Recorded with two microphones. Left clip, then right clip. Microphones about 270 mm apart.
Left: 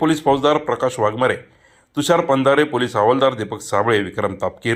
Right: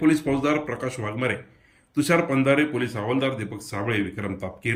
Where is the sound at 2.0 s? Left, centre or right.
Left.